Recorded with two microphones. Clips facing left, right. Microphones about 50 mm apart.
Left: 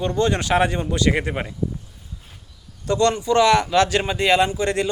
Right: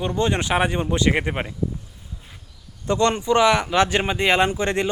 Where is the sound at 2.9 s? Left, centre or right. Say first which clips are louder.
Left 1 dB; right.